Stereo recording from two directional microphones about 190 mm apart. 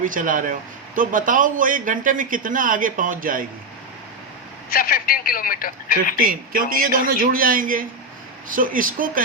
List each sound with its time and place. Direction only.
0.0 s speech: 45° right (ahead or behind)
4.7 s speech: 50° left (ahead or behind)
6.1 s speech: 50° right (ahead or behind)